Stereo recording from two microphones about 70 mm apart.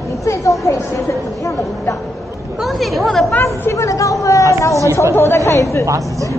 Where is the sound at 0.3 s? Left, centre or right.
Left.